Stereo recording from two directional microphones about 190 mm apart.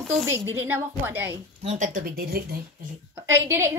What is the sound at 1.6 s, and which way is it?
Speech, 40° right (ahead or behind).